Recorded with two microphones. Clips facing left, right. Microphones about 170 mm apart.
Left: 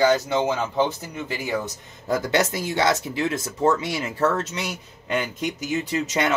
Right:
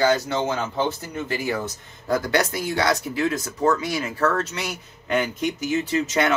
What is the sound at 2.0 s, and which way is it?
Speech, 20° left (ahead or behind).